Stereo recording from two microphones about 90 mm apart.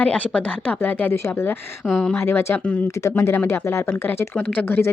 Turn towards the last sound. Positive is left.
turn(degrees=20)  # may be behind; listen again after turning